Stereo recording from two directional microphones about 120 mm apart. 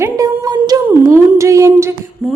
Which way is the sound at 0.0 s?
30° right (ahead or behind).